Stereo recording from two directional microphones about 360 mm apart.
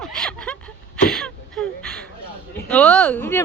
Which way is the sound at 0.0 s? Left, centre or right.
Centre.